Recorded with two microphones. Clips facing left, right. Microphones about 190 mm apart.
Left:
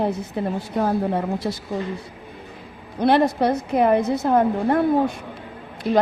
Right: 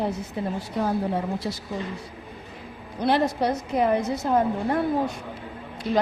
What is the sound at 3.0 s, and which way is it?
A woman's voice, 60° left (ahead or behind).